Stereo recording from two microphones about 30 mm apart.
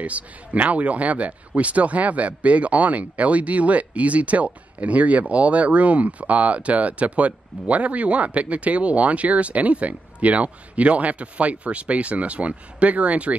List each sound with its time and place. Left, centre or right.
0.0 s speech: right